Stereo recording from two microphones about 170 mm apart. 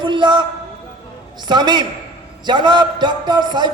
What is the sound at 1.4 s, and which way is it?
A man's voice, 25° right (ahead or behind).